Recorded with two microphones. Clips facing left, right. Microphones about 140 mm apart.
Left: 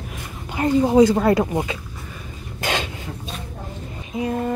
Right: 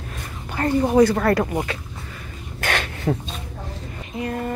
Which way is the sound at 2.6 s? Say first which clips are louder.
Left 1 dB; 20° left (ahead or behind).